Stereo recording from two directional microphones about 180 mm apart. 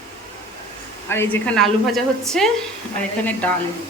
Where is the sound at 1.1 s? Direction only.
10° left (ahead or behind).